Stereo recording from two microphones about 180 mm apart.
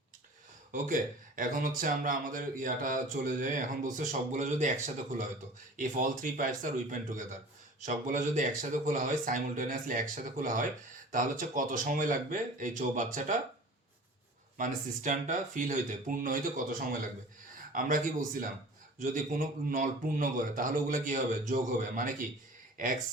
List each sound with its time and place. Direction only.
0.7 s speech: 45° right (ahead or behind)
5.7 s speech: 45° right (ahead or behind)
14.6 s speech: 45° right (ahead or behind)